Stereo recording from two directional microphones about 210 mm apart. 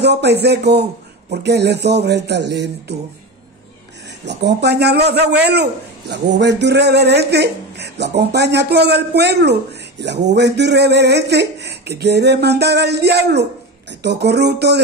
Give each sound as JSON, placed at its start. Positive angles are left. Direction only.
{"t": 0.0, "sound": "a man's voice", "side_deg": -55}
{"t": 4.3, "sound": "a man's voice", "side_deg": -55}